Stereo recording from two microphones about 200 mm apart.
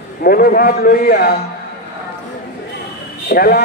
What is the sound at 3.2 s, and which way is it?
Speech, 50° left (ahead or behind).